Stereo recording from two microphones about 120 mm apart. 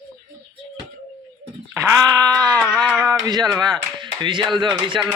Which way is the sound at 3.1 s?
35° right (ahead or behind).